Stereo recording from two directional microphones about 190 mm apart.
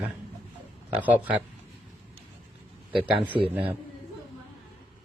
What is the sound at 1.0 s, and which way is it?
Speech, 10° right (ahead or behind).